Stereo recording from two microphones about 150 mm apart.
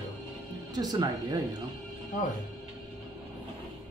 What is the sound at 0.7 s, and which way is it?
Speech, 25° right (ahead or behind).